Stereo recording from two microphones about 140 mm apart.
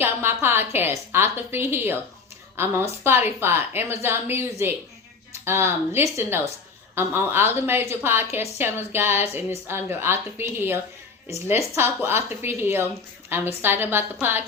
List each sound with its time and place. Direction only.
0.0 s a woman's voice: 15° right (ahead or behind)